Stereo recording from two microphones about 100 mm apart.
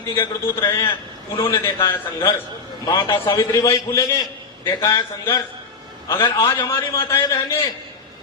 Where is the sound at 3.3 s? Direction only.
30° left (ahead or behind).